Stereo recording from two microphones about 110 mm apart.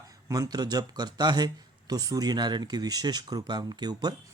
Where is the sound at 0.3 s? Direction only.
35° right (ahead or behind).